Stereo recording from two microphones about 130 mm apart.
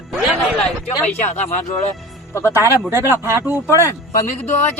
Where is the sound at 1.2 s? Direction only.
60° left (ahead or behind).